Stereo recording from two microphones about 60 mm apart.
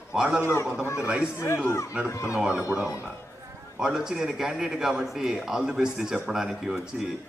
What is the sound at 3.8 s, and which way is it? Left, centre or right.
A man's voice, centre.